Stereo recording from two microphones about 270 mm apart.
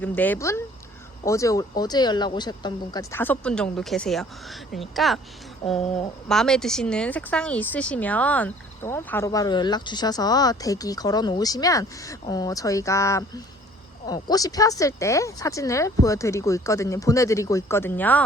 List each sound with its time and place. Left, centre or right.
0.0 s speech: centre
5.8 s speech: left
6.2 s speech: centre